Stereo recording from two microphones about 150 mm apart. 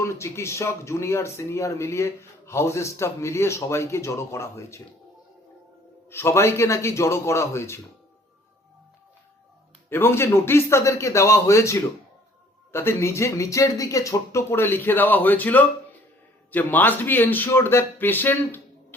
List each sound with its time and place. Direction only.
0.0 s speech: 20° left (ahead or behind)
6.1 s speech: 15° left (ahead or behind)
9.9 s a man's voice: 15° left (ahead or behind)